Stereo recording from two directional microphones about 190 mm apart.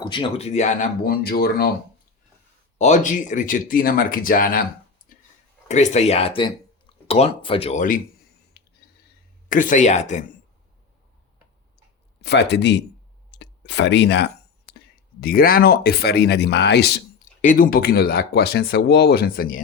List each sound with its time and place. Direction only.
0.0 s speech: 25° left (ahead or behind); by 1.7 s 55° left (ahead or behind)
2.7 s speech: 40° left (ahead or behind)
5.6 s speech: 40° left (ahead or behind)
7.8 s speech: 45° left (ahead or behind)
8.6 s a sound: 60° left (ahead or behind)
9.5 s speech: 45° left (ahead or behind)
12.2 s speech: 65° left (ahead or behind)
13.3 s a sound: 65° left (ahead or behind)
15.2 s speech: 50° left (ahead or behind)
17.4 s speech: 45° left (ahead or behind)